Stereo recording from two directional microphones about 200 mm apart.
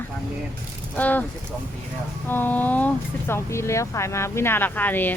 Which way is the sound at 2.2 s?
10° left (ahead or behind).